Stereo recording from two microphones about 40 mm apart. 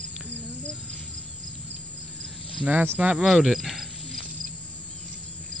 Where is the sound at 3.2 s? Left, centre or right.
Centre.